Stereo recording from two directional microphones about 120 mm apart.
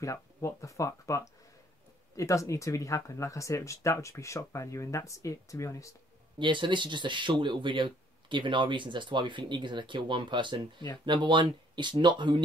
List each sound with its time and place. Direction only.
0.0 s speech: 25° left (ahead or behind)
6.3 s speech: 40° right (ahead or behind)